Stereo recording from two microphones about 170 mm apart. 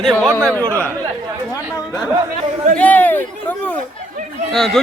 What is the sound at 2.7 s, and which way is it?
Speech, 10° left (ahead or behind).